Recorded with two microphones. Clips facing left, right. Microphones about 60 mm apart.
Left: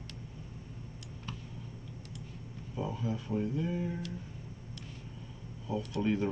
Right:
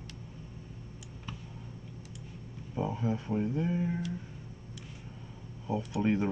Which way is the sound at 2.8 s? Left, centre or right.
Right.